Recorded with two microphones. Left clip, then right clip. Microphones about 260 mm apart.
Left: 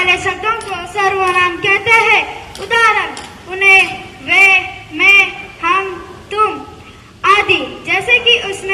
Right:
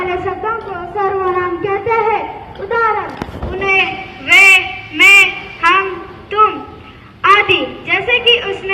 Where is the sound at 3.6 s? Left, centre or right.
Left.